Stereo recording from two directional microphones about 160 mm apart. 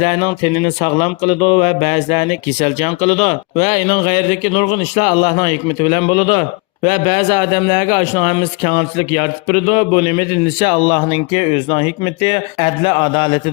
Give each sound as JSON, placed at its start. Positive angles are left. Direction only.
{"t": 0.0, "sound": "speech", "side_deg": 40}
{"t": 10.8, "sound": "speech", "side_deg": 25}
{"t": 11.1, "sound": "speech", "side_deg": 40}